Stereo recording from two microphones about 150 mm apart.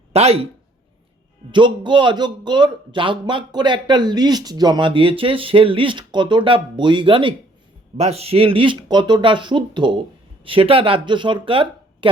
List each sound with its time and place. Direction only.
0.1 s speech: 40° right (ahead or behind)
1.5 s a man's voice: 30° right (ahead or behind)